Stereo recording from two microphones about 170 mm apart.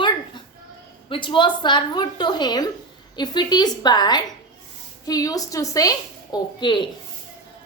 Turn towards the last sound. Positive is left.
turn(degrees=25)  # may be behind; listen again after turning